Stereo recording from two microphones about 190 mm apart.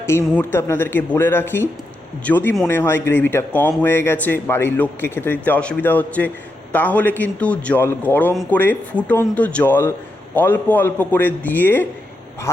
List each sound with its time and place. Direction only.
0.0 s speech: 15° left (ahead or behind)